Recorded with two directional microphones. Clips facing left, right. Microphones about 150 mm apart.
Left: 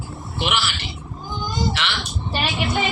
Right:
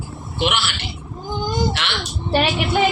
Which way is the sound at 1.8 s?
60° right (ahead or behind).